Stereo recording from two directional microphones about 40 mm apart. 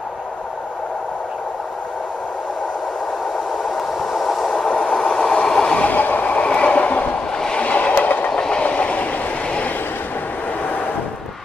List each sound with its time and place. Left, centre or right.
3.7 s train: centre
4.6 s train: left
5.9 s train: left
6.2 s train: left
8.3 s train: centre
8.6 s train: left